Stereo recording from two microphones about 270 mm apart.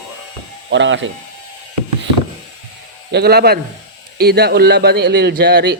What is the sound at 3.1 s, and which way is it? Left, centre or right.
A man's voice, right.